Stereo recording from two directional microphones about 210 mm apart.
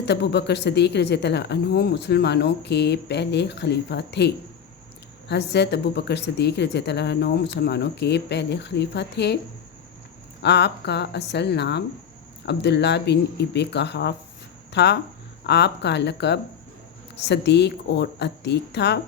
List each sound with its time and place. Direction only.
0.0 s speech: 55° left (ahead or behind)
5.3 s speech: 55° left (ahead or behind)
10.4 s a woman's voice: 55° left (ahead or behind)